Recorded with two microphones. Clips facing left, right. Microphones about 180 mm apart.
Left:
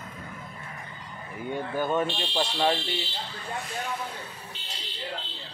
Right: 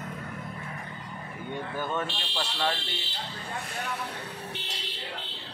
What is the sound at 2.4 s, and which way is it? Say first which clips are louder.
Speech: left 5 dB; 15° left (ahead or behind).